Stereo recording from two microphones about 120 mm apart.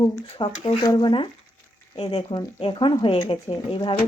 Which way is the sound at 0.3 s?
45° left (ahead or behind).